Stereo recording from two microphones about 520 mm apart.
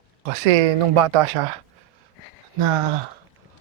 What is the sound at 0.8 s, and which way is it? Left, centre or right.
Speech, right.